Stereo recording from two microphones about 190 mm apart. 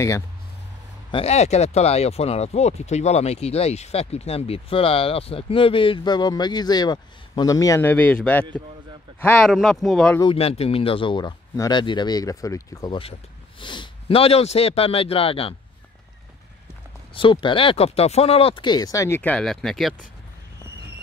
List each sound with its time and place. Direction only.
1.1 s speech: 35° left (ahead or behind); by 9.5 s 10° left (ahead or behind)
9.5 s speech: centre (ahead or behind)
10.2 s speech: 30° left (ahead or behind)
17.1 s speech: 25° left (ahead or behind); by 20.1 s centre (ahead or behind)